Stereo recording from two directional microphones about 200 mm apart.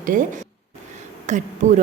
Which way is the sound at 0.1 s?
40° right (ahead or behind).